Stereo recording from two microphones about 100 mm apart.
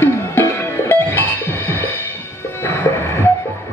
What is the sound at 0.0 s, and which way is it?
Music, 25° left (ahead or behind).